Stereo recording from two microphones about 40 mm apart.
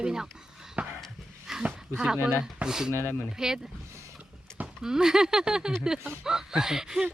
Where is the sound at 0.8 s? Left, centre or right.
Right.